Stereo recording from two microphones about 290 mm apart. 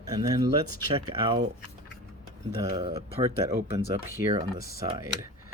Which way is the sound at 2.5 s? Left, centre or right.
Centre.